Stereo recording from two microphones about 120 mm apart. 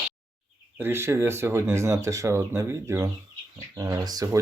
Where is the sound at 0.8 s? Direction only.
20° right (ahead or behind).